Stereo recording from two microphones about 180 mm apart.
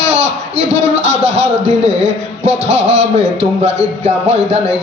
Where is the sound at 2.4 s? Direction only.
40° right (ahead or behind).